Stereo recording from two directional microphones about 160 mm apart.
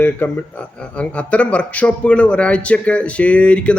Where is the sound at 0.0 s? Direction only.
10° left (ahead or behind).